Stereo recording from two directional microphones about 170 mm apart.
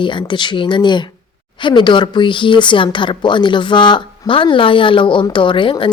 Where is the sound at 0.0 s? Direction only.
30° left (ahead or behind).